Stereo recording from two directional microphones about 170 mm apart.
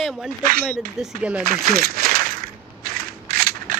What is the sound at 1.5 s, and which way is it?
Speech, 60° right (ahead or behind).